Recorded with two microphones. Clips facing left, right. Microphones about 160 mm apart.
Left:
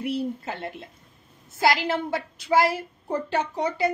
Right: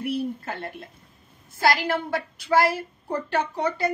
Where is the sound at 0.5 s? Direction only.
15° left (ahead or behind).